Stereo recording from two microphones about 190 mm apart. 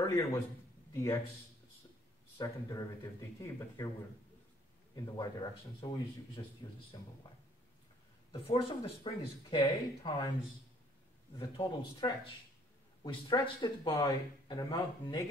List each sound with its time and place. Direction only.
0.0 s a sound: 20° left (ahead or behind)
2.3 s speech: 20° left (ahead or behind)
4.9 s speech: 20° left (ahead or behind)
8.3 s speech: 30° left (ahead or behind)
11.3 s speech: 25° left (ahead or behind)